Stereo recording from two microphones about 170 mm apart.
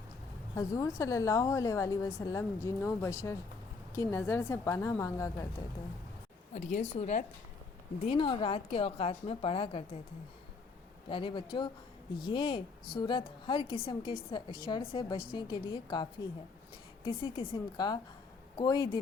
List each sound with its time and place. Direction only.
0.5 s a woman's voice: 20° left (ahead or behind)
6.5 s a woman's voice: 45° left (ahead or behind)
8.0 s a woman's voice: 30° left (ahead or behind)
11.1 s a woman's voice: 30° left (ahead or behind)